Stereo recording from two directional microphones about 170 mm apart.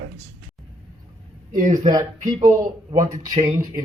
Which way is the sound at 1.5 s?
50° right (ahead or behind).